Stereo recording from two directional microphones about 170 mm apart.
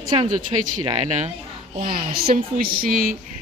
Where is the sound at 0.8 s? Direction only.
40° right (ahead or behind).